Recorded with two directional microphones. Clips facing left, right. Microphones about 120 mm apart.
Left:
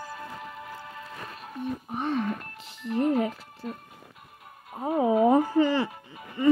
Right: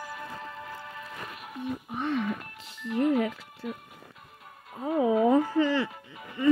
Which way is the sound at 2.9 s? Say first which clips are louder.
Even; 35° left (ahead or behind).